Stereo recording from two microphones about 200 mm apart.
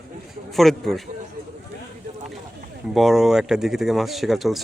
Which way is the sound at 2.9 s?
Centre (ahead or behind).